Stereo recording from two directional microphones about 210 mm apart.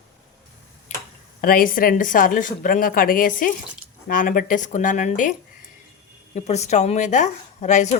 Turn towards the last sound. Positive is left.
turn(degrees=35)  # may be behind; listen again after turning